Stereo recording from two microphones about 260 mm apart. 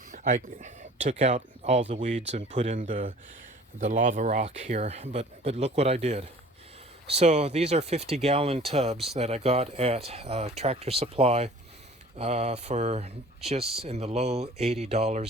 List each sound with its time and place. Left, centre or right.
0.1 s speech: right